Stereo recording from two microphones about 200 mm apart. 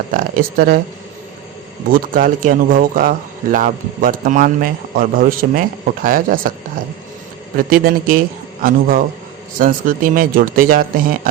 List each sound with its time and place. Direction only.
0.1 s speech: 45° right (ahead or behind)
1.9 s speech: 45° right (ahead or behind)
7.7 s speech: 45° right (ahead or behind)